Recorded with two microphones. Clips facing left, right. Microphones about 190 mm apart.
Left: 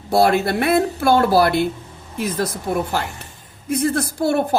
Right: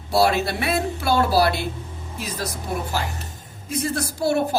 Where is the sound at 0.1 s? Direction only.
55° left (ahead or behind).